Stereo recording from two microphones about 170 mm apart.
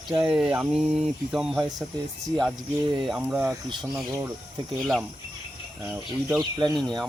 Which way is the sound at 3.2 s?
10° right (ahead or behind).